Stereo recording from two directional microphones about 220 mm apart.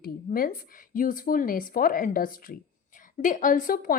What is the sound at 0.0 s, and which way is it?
A woman's voice, 40° left (ahead or behind).